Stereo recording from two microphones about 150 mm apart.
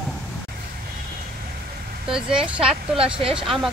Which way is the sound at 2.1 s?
5° right (ahead or behind).